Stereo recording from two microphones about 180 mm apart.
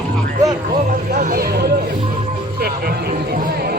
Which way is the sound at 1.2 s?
50° right (ahead or behind).